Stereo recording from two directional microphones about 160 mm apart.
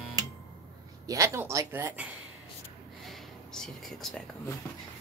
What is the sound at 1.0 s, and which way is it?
Speech, 20° right (ahead or behind).